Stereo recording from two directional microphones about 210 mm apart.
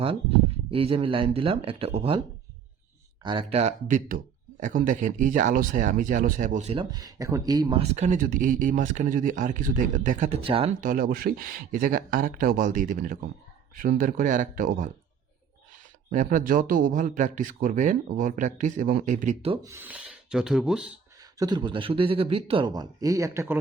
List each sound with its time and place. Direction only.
0.7 s a man's voice: 25° right (ahead or behind)
3.2 s speech: 25° right (ahead or behind)
6.9 s speech: 15° right (ahead or behind)
10.8 s speech: 40° right (ahead or behind)
16.0 s speech: 35° right (ahead or behind)
19.6 s rub: 10° right (ahead or behind)
21.3 s a man's voice: 20° right (ahead or behind)